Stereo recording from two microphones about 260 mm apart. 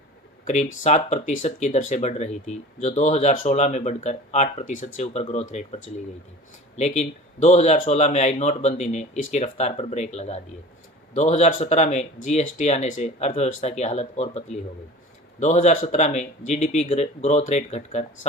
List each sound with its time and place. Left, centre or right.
0.9 s speech: left